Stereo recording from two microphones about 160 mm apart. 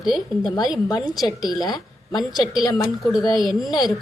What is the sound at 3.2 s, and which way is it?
Speech, 25° left (ahead or behind).